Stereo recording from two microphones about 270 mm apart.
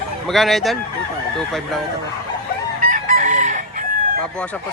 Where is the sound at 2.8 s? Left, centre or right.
Right.